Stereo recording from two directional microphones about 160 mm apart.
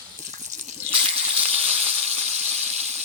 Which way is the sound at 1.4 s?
40° right (ahead or behind).